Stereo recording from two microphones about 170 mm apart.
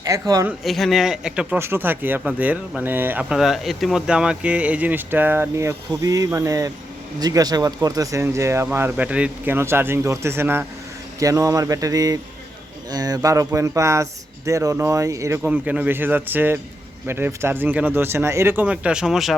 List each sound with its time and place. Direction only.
0.0 s speech: 20° right (ahead or behind)
0.4 s speech: centre (ahead or behind)